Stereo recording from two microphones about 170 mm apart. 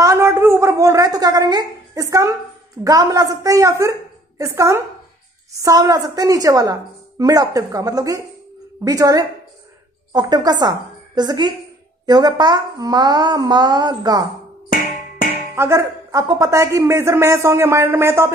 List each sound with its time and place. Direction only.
0.0 s a woman's voice: 15° right (ahead or behind)
15.5 s a man's voice: 15° right (ahead or behind)